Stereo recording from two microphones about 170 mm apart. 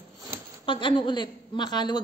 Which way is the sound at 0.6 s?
30° left (ahead or behind).